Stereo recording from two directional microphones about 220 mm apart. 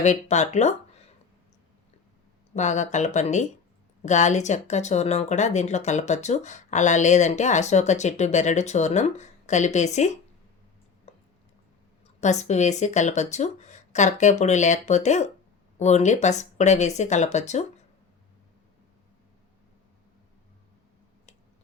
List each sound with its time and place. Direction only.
0.0 s speech: 30° left (ahead or behind)
2.6 s speech: 35° left (ahead or behind)
11.1 s a sound: 30° left (ahead or behind)
12.2 s speech: 30° left (ahead or behind)